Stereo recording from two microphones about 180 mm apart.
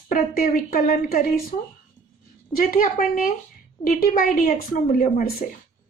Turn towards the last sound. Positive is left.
turn(degrees=50)  # may be behind; listen again after turning